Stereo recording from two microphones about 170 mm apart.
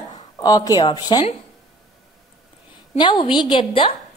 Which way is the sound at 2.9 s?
30° left (ahead or behind).